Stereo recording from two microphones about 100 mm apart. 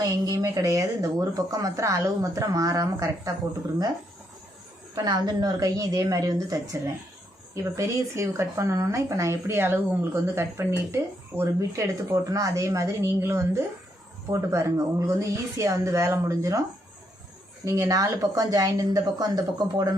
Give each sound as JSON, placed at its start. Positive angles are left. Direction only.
{"t": 0.0, "sound": "speech", "side_deg": -35}
{"t": 4.9, "sound": "speech", "side_deg": -45}
{"t": 17.7, "sound": "speech", "side_deg": -35}